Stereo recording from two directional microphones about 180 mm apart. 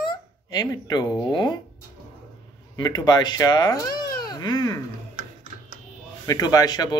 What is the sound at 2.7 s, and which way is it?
Speech, 20° left (ahead or behind).